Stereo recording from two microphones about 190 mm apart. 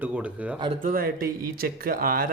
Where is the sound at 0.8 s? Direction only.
50° right (ahead or behind).